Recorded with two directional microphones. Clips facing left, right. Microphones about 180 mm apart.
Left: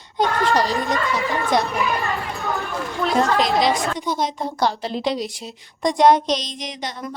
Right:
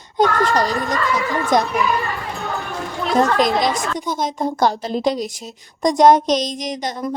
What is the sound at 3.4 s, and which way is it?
A woman's voice, 45° right (ahead or behind).